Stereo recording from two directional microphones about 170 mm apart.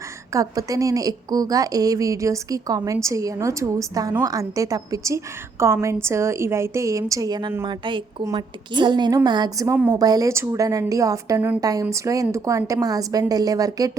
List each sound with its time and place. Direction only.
0.3 s a woman's voice: 20° right (ahead or behind)